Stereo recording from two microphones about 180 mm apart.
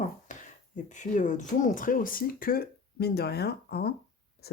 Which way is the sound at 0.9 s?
45° left (ahead or behind).